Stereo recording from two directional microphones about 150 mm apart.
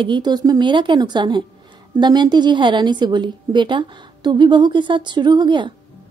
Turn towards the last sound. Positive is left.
turn(degrees=-30)  # may be behind; listen again after turning